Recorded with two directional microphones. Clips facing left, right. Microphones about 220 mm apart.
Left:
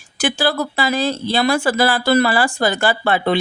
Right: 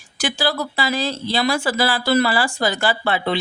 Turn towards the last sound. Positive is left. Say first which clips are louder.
# left 4 dB
turn(degrees=50)  # may be behind; listen again after turning